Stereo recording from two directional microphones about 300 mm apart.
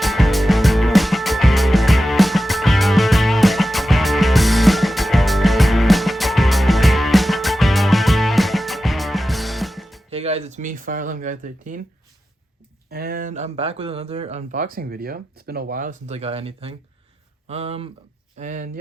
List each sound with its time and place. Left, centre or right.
0.0 s music: centre
10.1 s speech: right
12.9 s speech: right